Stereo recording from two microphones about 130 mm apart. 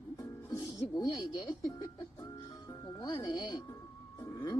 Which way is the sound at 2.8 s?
35° left (ahead or behind).